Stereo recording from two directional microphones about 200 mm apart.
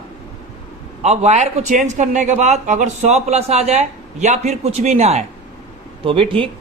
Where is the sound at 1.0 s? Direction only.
35° right (ahead or behind).